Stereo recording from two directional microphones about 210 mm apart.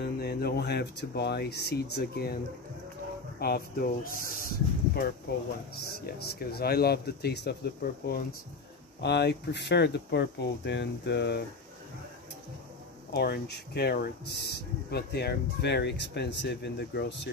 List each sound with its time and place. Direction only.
0.0 s speech: 50° left (ahead or behind)
3.3 s speech: 45° left (ahead or behind)
5.8 s speech: 50° left (ahead or behind)
13.1 s speech: 50° left (ahead or behind)